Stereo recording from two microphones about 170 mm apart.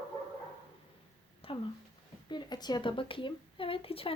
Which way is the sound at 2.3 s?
25° left (ahead or behind).